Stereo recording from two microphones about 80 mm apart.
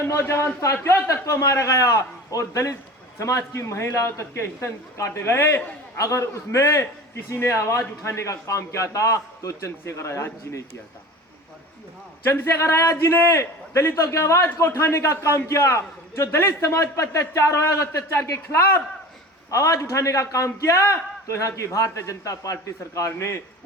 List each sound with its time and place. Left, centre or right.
0.0 s a man's voice: left
6.0 s a man's voice: left
12.2 s a man's voice: left